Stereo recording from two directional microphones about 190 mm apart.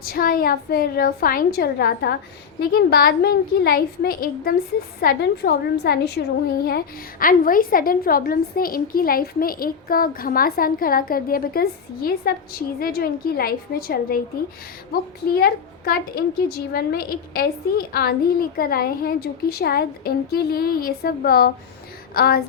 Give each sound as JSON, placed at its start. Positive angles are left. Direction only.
{"t": 0.0, "sound": "a woman's voice", "side_deg": 50}
{"t": 15.3, "sound": "a woman's voice", "side_deg": 50}